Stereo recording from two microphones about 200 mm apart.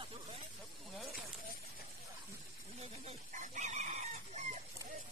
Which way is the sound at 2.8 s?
35° right (ahead or behind).